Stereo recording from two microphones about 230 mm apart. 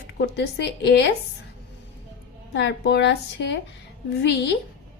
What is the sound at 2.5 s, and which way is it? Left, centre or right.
A woman's voice, left.